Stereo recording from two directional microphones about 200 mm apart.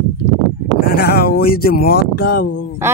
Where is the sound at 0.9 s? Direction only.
50° left (ahead or behind).